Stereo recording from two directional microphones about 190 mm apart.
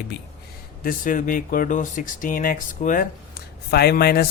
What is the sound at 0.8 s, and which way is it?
Speech, 45° left (ahead or behind).